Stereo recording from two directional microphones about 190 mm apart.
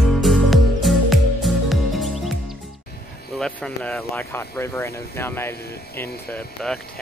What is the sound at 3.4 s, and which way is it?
Speech, 5° left (ahead or behind).